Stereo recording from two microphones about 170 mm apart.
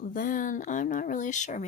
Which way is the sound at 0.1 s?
55° left (ahead or behind).